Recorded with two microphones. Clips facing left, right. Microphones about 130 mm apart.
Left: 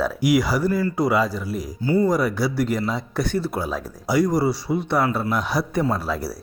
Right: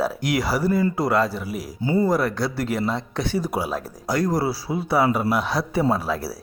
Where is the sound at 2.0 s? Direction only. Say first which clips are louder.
Left 1 dB; centre (ahead or behind).